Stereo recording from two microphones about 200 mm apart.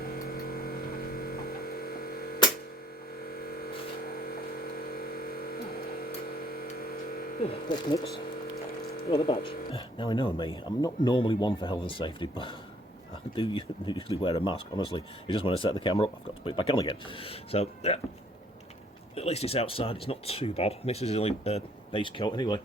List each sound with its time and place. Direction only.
0.0 s a sound: 50° left (ahead or behind)
6.5 s vehicle: 50° left (ahead or behind)
7.4 s speech: 25° left (ahead or behind)
9.0 s speech: 30° left (ahead or behind)
19.1 s speech: 30° left (ahead or behind)